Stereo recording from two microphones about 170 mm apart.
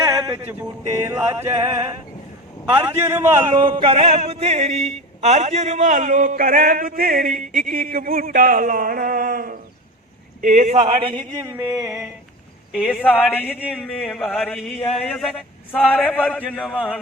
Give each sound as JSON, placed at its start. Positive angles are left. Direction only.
{"t": 0.0, "sound": "a sound", "side_deg": -25}
{"t": 1.0, "sound": "a man's voice", "side_deg": -15}
{"t": 2.7, "sound": "a man's voice", "side_deg": -10}
{"t": 3.6, "sound": "a man's voice", "side_deg": -30}
{"t": 11.3, "sound": "a man's voice", "side_deg": -15}
{"t": 12.7, "sound": "a man's voice", "side_deg": -5}
{"t": 13.1, "sound": "speech", "side_deg": 10}
{"t": 13.6, "sound": "a man's voice", "side_deg": -10}